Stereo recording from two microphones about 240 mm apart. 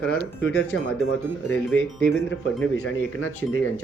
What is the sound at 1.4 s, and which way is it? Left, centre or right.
Speech, centre.